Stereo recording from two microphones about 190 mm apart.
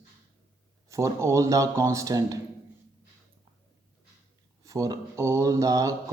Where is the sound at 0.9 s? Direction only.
15° right (ahead or behind).